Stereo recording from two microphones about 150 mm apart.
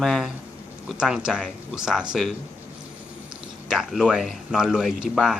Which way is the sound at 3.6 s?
5° right (ahead or behind).